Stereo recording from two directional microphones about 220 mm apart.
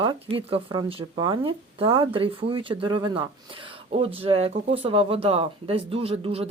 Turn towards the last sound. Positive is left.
turn(degrees=-25)  # may be behind; listen again after turning